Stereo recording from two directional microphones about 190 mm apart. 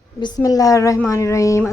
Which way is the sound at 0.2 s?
20° left (ahead or behind).